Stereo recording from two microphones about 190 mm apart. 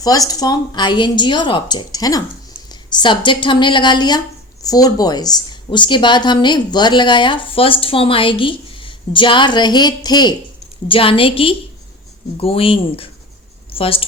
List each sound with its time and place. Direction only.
0.0 s a woman's voice: 20° left (ahead or behind)